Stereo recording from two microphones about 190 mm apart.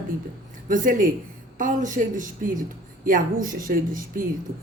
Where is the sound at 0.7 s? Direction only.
45° right (ahead or behind).